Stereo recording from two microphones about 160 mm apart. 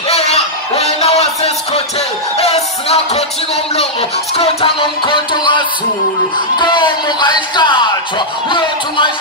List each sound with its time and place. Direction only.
0.1 s music: 40° left (ahead or behind)
4.4 s music: 35° left (ahead or behind)
6.6 s speech: 30° left (ahead or behind)
8.5 s music: 30° left (ahead or behind)